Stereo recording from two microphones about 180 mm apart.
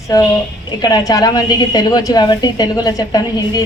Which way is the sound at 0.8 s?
20° left (ahead or behind).